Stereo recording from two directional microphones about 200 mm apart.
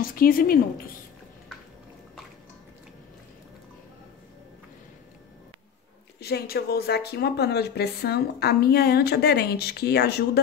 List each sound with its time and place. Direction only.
0.0 s speech: 45° left (ahead or behind)
6.1 s speech: 55° left (ahead or behind)